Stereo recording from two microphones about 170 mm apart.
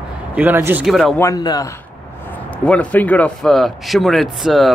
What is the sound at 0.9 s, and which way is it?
Speech, centre (ahead or behind).